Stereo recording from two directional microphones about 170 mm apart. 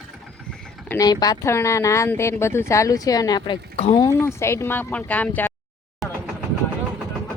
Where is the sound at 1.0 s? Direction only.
20° left (ahead or behind).